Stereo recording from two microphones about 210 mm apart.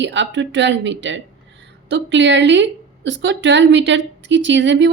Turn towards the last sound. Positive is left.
turn(degrees=-60)  # may be behind; listen again after turning